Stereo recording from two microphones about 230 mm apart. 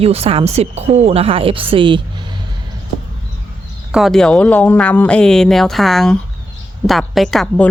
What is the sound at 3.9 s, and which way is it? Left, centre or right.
A woman's voice, centre.